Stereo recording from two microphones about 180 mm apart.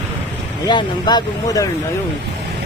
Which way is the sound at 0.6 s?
25° left (ahead or behind).